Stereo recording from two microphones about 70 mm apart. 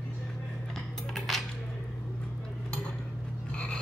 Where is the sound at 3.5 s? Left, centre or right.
Centre.